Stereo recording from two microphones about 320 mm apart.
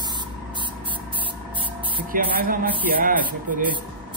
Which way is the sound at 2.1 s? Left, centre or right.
Right.